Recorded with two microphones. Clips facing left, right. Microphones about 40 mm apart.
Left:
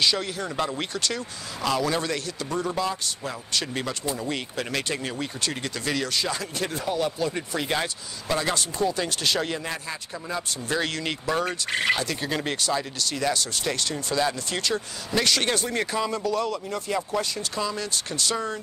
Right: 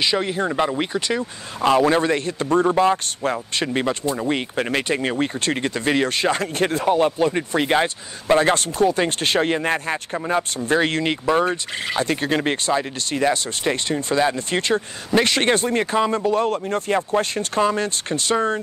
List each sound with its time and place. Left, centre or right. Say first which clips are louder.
0.0 s speech: right 5 dB; right
1.7 s speech: right 9 dB; right
12.0 s speech: right 7 dB; right